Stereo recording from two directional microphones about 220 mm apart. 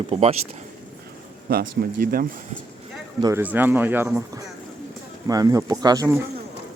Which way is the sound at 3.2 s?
15° right (ahead or behind).